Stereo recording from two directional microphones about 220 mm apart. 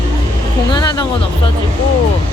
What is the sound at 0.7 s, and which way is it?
Speech, 20° left (ahead or behind).